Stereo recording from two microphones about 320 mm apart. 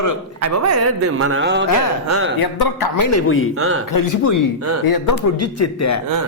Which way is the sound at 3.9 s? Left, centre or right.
Left.